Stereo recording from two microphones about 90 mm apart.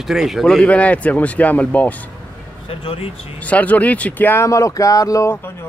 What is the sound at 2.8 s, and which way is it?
Speech, 85° left.